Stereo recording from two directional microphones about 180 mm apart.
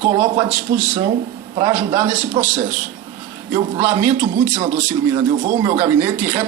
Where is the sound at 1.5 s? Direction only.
15° right (ahead or behind).